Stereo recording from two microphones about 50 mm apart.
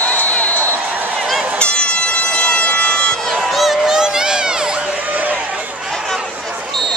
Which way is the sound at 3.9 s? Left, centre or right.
Centre.